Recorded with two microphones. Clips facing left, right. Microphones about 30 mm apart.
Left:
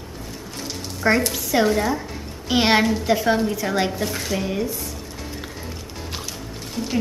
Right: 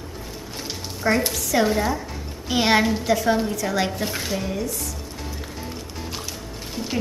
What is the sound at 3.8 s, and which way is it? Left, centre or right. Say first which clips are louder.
Speech: left 1 dB; centre.